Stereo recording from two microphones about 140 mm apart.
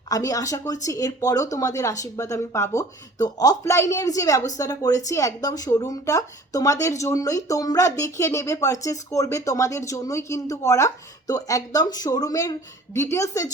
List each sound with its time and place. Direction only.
0.1 s speech: 25° left (ahead or behind)